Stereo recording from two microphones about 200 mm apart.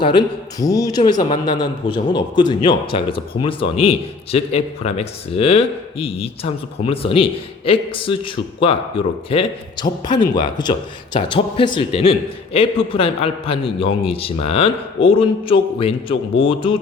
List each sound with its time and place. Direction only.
0.0 s a man's voice: 25° left (ahead or behind)